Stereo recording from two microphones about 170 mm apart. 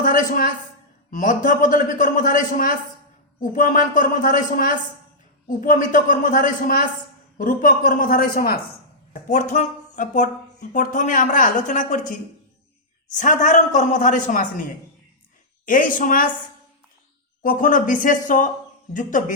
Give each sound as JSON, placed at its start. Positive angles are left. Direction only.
{"t": 0.0, "sound": "a man's voice", "side_deg": 55}
{"t": 9.3, "sound": "speech", "side_deg": 45}
{"t": 15.6, "sound": "speech", "side_deg": 55}
{"t": 17.4, "sound": "speech", "side_deg": 55}